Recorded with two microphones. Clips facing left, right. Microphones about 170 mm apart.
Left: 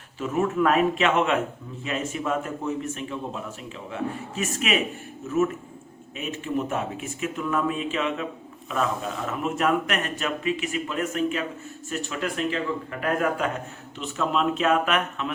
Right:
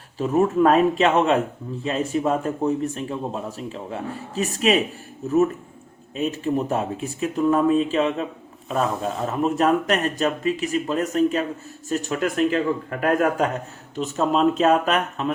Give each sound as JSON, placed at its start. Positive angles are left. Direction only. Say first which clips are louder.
{"t": 0.2, "sound": "a man's voice", "louder": "right 5 dB", "side_deg": -35}